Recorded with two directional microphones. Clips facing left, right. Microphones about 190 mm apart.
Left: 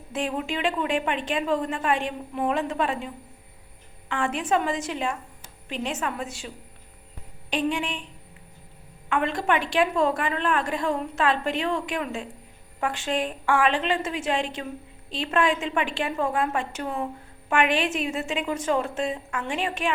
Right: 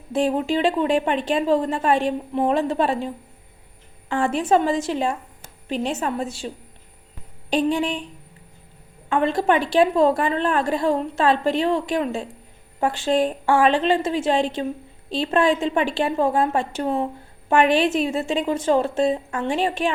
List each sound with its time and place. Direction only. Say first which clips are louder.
0.1 s a woman's voice: right 8 dB; 35° right (ahead or behind)
4.1 s a woman's voice: right 6 dB; 35° right (ahead or behind)
7.5 s a woman's voice: right 6 dB; 35° right (ahead or behind)
9.0 s a woman's voice: right 5 dB; 35° right (ahead or behind)